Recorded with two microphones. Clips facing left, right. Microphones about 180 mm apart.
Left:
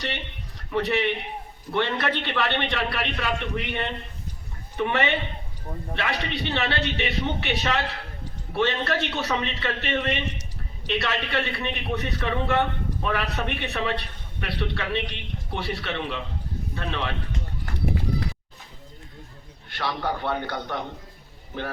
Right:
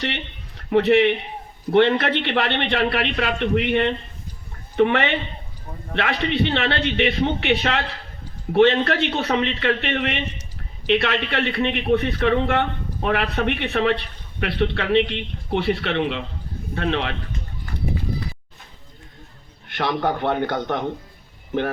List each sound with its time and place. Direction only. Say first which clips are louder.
0.7 s a man's voice: right 8 dB; 60° right (ahead or behind)
19.7 s a man's voice: right 6 dB; 55° right (ahead or behind)